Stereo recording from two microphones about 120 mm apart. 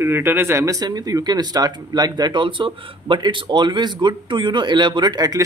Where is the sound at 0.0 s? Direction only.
20° right (ahead or behind).